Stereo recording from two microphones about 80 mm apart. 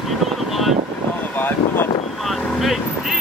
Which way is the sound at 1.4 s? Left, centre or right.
Left.